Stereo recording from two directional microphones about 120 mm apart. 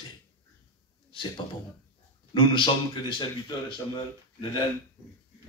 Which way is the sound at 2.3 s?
45° left (ahead or behind).